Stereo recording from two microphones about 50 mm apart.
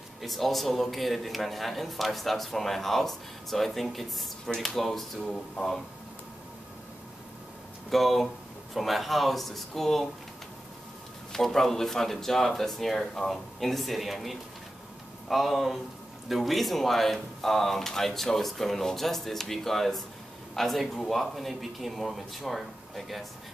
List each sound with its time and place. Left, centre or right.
0.2 s a man's voice: centre
7.9 s a man's voice: centre
11.3 s a man's voice: centre